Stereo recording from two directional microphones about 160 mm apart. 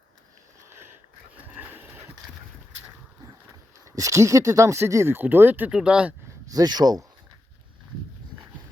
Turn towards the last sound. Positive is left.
turn(degrees=-25)  # may be behind; listen again after turning